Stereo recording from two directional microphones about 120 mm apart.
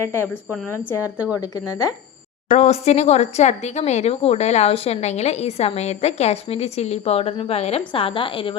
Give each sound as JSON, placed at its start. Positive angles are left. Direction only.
{"t": 0.0, "sound": "speech", "side_deg": 20}
{"t": 2.5, "sound": "speech", "side_deg": 65}